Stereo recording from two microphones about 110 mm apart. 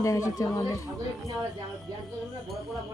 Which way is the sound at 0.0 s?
30° left (ahead or behind).